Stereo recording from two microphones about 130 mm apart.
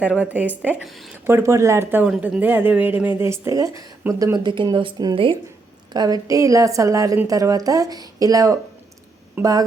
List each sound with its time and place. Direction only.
0.0 s a woman's voice: 10° right (ahead or behind)
0.9 s a woman's voice: centre (ahead or behind)
1.2 s a woman's voice: 20° right (ahead or behind)
4.0 s a woman's voice: 15° right (ahead or behind)
4.4 s speech: 35° right (ahead or behind)
5.9 s a woman's voice: 30° right (ahead or behind)